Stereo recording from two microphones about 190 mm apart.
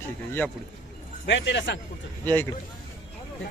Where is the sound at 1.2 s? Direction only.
70° left (ahead or behind).